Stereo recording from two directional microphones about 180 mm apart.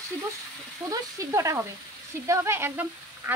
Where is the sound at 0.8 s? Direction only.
20° right (ahead or behind).